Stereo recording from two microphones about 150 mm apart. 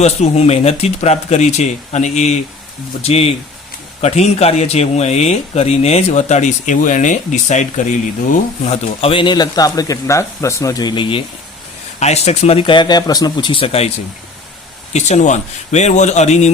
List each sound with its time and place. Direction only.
0.0 s speech: 45° left (ahead or behind)
11.9 s speech: 45° left (ahead or behind)
14.9 s speech: 50° left (ahead or behind)